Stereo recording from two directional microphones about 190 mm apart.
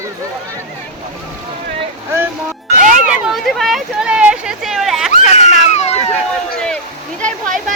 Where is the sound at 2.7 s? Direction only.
45° right (ahead or behind).